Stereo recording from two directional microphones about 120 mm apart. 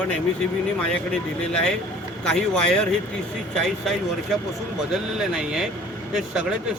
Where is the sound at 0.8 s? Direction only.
10° left (ahead or behind).